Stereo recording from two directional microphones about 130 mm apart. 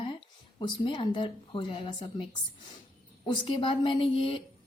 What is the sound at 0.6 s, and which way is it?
Speech, 40° left (ahead or behind).